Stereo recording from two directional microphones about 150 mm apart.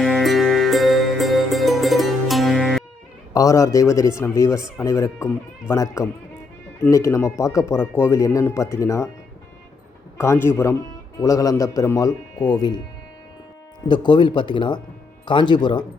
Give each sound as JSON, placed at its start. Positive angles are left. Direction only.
{"t": 0.0, "sound": "music", "side_deg": 0}
{"t": 3.3, "sound": "speech", "side_deg": 20}
{"t": 10.2, "sound": "a man's voice", "side_deg": 15}
{"t": 13.8, "sound": "speech", "side_deg": 30}